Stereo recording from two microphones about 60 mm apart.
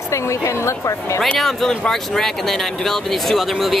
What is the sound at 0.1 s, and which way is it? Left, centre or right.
A woman's voice, left.